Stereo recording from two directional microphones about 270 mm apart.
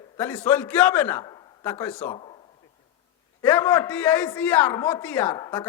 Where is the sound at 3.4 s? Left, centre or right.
Centre.